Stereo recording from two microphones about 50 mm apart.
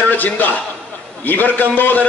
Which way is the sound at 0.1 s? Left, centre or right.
Left.